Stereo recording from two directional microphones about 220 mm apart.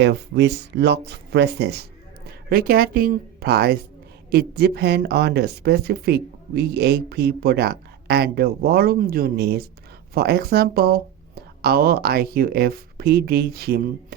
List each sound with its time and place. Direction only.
0.0 s speech: 50° right (ahead or behind)